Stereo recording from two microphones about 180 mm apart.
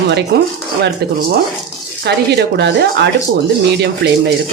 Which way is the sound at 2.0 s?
65° right (ahead or behind).